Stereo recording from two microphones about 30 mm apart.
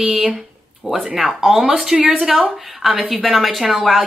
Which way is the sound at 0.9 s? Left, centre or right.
Centre.